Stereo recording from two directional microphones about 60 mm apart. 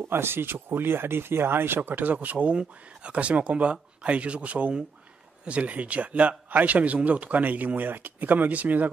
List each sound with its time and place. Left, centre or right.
0.1 s a man's voice: right